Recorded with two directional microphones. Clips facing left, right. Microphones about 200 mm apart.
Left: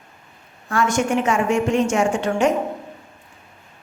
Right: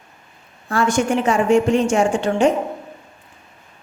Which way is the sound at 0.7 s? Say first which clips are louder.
Right 2 dB; 30° right (ahead or behind).